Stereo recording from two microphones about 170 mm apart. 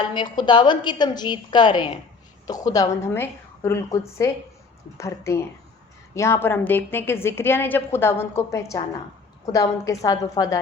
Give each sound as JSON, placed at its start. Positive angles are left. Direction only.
{"t": 0.1, "sound": "a woman's voice", "side_deg": 25}